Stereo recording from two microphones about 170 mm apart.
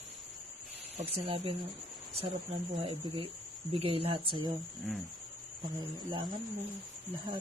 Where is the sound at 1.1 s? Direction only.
35° right (ahead or behind).